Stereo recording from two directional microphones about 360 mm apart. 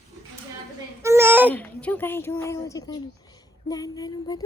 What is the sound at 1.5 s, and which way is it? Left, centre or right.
Speech, centre.